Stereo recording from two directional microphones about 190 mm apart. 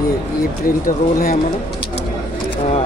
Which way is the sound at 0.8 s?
45° left (ahead or behind).